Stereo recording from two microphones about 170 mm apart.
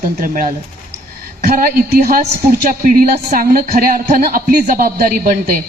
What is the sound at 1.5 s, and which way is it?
Speech, 60° right (ahead or behind).